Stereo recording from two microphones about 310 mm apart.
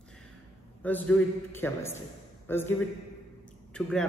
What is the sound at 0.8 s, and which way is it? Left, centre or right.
A man's voice, centre.